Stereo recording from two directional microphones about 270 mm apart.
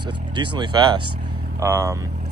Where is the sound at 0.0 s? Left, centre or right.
Centre.